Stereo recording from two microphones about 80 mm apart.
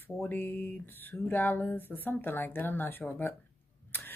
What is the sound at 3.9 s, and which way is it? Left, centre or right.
Camera, left.